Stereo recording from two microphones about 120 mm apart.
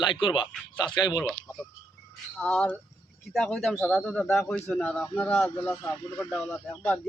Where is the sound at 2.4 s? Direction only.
10° left (ahead or behind).